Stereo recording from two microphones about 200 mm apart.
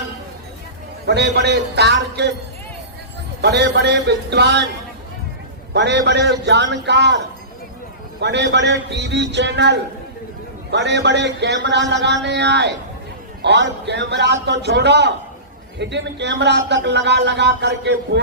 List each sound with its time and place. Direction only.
1.0 s a man's voice: 55° right (ahead or behind)
3.4 s a man's voice: 55° right (ahead or behind)
5.7 s a man's voice: 60° right (ahead or behind)
8.2 s a man's voice: 60° right (ahead or behind)